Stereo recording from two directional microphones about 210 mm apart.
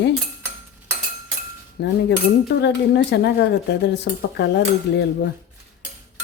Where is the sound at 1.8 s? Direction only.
55° left (ahead or behind).